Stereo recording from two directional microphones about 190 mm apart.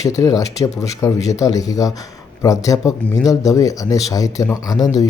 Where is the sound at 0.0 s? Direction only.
15° left (ahead or behind).